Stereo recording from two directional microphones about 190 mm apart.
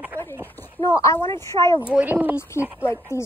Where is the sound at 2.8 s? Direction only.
15° left (ahead or behind).